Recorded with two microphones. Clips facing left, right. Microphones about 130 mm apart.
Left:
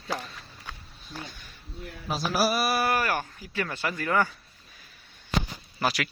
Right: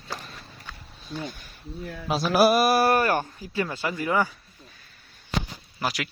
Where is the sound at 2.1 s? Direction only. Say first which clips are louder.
Right 6 dB; 65° right (ahead or behind); by 4.2 s 15° right (ahead or behind).